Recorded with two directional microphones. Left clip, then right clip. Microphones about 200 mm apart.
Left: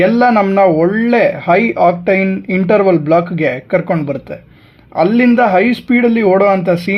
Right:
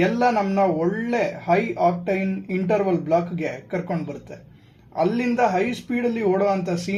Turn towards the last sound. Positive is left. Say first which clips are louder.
# left 11 dB
turn(degrees=45)  # may be behind; listen again after turning